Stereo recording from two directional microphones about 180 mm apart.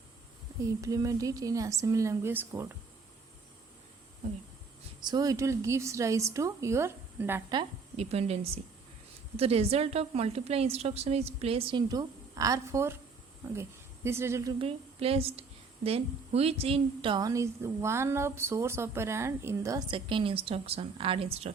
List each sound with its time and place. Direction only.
0.8 s a woman's voice: 20° right (ahead or behind)
5.0 s a woman's voice: 20° right (ahead or behind)
7.5 s a woman's voice: 30° right (ahead or behind); by 14.5 s 15° right (ahead or behind)
14.6 s a woman's voice: 35° right (ahead or behind); by 19.8 s 15° right (ahead or behind)
19.9 s a woman's voice: 30° right (ahead or behind)